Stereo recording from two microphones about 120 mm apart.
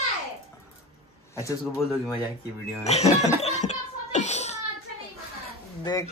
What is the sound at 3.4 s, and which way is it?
Child singing, 70° left (ahead or behind).